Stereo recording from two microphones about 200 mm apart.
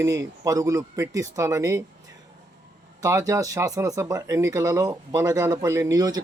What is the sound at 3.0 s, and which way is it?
Speech, 15° right (ahead or behind).